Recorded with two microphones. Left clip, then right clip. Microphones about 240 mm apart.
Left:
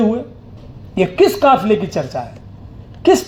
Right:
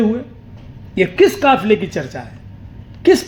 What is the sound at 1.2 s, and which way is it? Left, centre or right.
Speech, left.